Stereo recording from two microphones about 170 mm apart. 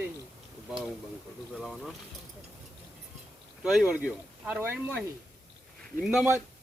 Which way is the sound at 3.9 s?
5° right (ahead or behind).